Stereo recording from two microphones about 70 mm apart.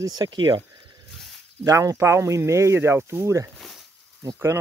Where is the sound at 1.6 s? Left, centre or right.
Right.